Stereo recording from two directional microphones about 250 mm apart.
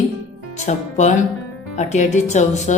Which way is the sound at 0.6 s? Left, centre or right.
Left.